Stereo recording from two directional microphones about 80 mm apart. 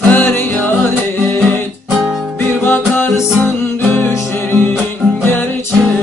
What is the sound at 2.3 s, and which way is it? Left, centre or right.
Music, left.